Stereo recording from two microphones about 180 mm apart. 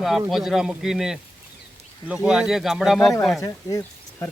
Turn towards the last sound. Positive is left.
turn(degrees=15)  # may be behind; listen again after turning